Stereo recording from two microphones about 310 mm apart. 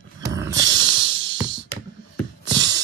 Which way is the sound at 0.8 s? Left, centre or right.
Centre.